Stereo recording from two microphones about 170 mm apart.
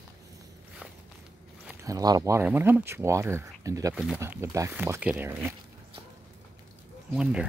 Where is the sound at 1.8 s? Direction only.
20° right (ahead or behind).